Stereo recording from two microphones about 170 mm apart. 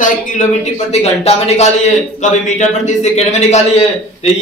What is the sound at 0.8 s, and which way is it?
A man's voice, 40° left (ahead or behind).